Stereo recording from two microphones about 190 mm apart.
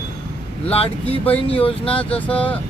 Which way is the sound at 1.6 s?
30° left (ahead or behind).